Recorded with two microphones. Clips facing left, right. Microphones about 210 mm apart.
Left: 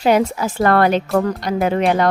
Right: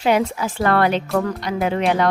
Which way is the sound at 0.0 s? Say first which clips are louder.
Left 3 dB; 40° left (ahead or behind).